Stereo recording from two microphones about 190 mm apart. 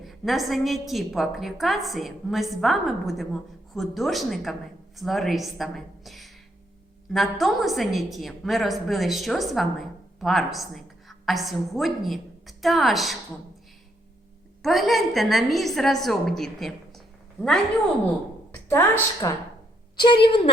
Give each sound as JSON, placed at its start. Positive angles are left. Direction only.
{"t": 0.0, "sound": "a woman's voice", "side_deg": 0}
{"t": 14.6, "sound": "a woman's voice", "side_deg": 0}
{"t": 18.7, "sound": "a woman's voice", "side_deg": 15}
{"t": 20.2, "sound": "a woman's voice", "side_deg": 25}